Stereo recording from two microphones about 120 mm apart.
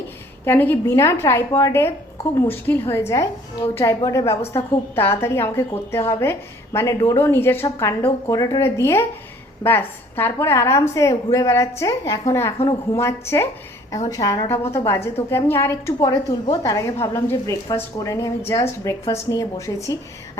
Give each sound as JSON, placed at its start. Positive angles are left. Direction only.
{"t": 0.4, "sound": "a woman's voice", "side_deg": 15}